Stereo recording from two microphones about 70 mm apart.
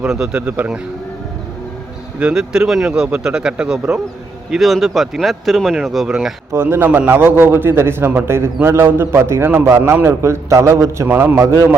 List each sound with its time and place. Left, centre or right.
0.0 s speech: centre
2.1 s speech: centre
6.5 s a man's voice: right
11.1 s a man's voice: right